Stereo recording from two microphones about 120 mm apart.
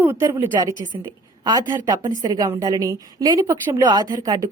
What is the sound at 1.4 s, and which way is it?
A woman's voice, 35° right (ahead or behind).